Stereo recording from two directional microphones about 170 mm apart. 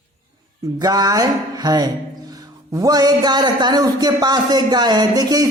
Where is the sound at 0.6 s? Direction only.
20° right (ahead or behind).